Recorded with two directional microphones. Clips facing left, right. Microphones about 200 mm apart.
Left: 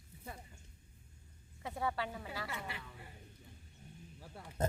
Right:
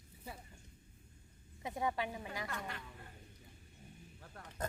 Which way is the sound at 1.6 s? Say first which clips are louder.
Right 1 dB; 15° right (ahead or behind).